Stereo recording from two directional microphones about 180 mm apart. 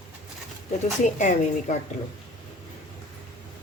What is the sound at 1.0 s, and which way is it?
Speech, 40° left (ahead or behind).